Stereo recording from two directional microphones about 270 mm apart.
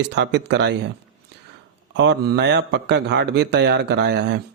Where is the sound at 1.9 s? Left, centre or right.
Right.